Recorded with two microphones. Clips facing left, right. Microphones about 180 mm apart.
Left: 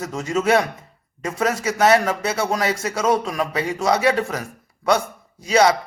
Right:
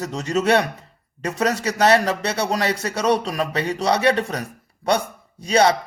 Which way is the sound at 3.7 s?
35° right (ahead or behind).